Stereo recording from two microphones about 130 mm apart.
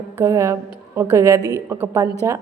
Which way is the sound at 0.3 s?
25° right (ahead or behind).